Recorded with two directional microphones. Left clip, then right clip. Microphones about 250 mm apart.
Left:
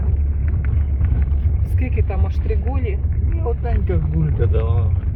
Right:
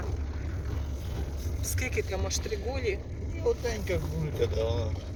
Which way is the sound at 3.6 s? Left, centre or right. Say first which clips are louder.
Left 4 dB; left.